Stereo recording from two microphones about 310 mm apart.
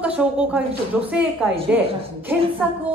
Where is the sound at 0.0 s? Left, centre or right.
Centre.